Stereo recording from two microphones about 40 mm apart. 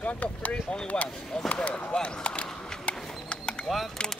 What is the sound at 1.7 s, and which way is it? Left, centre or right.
Speech, left.